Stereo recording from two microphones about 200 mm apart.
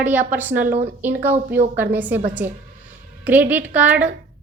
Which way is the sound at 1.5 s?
50° right (ahead or behind).